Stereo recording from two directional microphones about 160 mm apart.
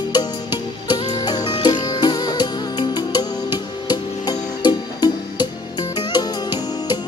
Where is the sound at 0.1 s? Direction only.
25° left (ahead or behind).